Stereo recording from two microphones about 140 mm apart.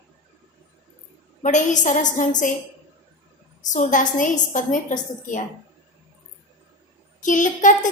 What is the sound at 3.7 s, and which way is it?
A woman's voice, 65° left (ahead or behind).